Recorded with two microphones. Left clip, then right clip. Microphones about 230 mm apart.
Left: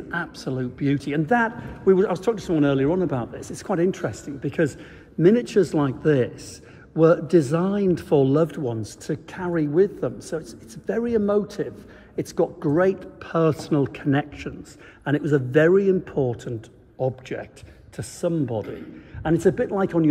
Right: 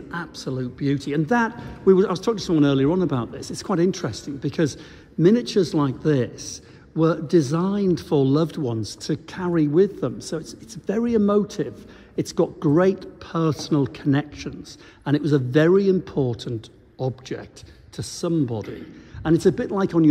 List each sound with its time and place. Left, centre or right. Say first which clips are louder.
0.1 s a man's voice: left 2 dB; centre
1.2 s a man's voice: left 1 dB; right
13.0 s a man's voice: left 3 dB; centre